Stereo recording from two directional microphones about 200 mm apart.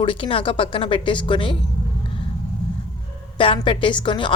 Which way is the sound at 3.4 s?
25° left (ahead or behind).